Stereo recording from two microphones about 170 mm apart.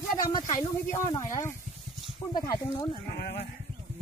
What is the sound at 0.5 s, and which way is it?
Speech, 20° left (ahead or behind).